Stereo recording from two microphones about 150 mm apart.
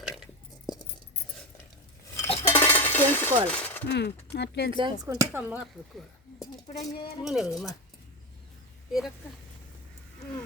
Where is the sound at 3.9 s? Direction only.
90° left.